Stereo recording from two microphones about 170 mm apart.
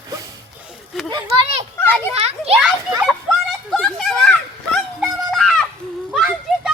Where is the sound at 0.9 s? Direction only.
Centre (ahead or behind).